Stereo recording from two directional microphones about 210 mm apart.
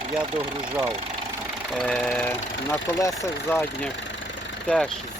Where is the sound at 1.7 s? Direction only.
Centre (ahead or behind).